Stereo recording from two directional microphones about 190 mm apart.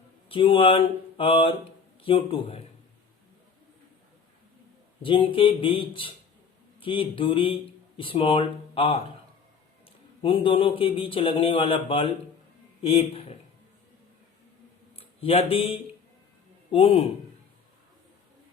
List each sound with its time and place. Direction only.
0.3 s a man's voice: 30° left (ahead or behind)
5.0 s a man's voice: 25° left (ahead or behind)
10.2 s a man's voice: 25° left (ahead or behind)
14.9 s a man's voice: 30° left (ahead or behind)